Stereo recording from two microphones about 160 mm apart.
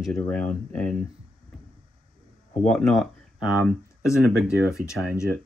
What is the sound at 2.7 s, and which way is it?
Speech, centre (ahead or behind).